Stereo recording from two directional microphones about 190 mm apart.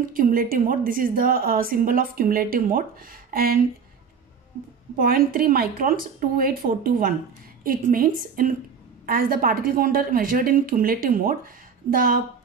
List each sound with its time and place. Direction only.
0.1 s a woman's voice: 45° right (ahead or behind)
4.9 s a woman's voice: 50° right (ahead or behind)